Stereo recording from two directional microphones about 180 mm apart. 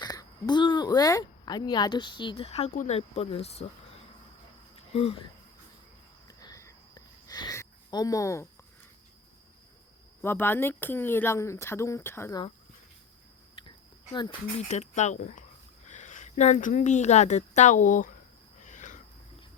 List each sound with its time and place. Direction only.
0.0 s speech: 20° left (ahead or behind)
4.9 s speech: 35° left (ahead or behind)
6.2 s a sound: 20° left (ahead or behind)
10.2 s speech: 15° left (ahead or behind)
13.6 s a sound: 25° left (ahead or behind)
14.7 s a woman's voice: 40° left (ahead or behind)
18.6 s cricket: 45° left (ahead or behind)